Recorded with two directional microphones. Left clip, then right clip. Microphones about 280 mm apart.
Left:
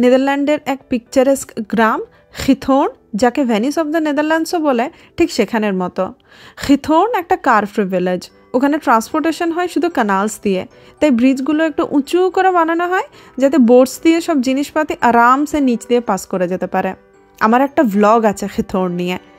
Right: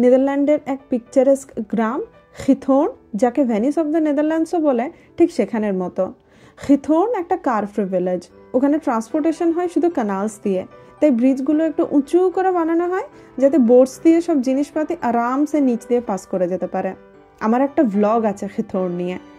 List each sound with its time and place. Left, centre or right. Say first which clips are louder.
0.0 s speech: left 2 dB; left